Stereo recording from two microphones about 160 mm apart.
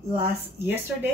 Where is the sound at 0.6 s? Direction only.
10° right (ahead or behind).